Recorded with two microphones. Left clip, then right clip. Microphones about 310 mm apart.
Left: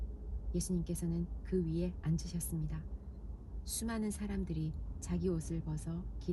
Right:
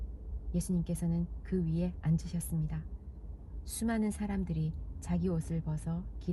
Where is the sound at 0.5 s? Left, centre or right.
Right.